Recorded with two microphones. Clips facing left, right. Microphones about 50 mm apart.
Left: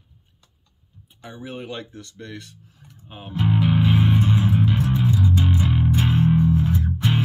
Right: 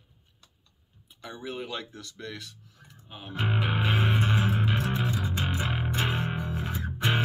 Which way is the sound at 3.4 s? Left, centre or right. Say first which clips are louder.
Left 8 dB; centre.